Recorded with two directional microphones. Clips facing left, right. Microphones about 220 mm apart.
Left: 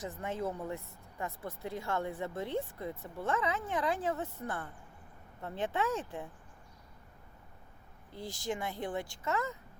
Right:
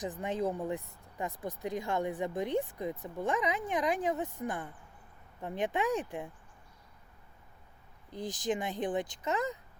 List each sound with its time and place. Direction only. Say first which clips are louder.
0.0 s speech: right 4 dB; 15° right (ahead or behind)
8.1 s speech: right 4 dB; 15° right (ahead or behind)